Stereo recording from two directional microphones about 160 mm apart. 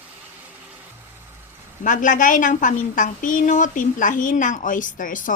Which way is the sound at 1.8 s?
55° left (ahead or behind).